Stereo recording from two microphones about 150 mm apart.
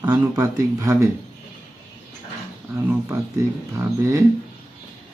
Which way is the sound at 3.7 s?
20° right (ahead or behind).